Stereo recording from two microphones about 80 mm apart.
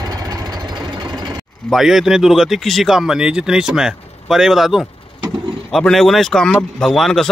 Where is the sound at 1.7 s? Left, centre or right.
Centre.